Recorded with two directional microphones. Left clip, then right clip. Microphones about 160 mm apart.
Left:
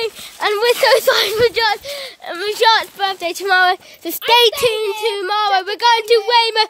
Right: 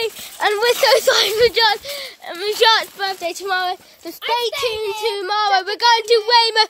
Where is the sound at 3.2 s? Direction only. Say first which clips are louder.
Left 9 dB; 35° left (ahead or behind); by 4.5 s 55° left (ahead or behind).